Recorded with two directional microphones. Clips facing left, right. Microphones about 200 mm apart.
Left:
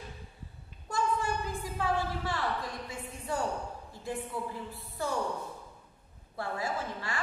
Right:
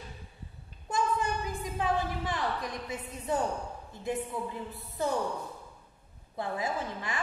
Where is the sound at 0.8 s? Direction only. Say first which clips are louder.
Right 1 dB; 20° right (ahead or behind).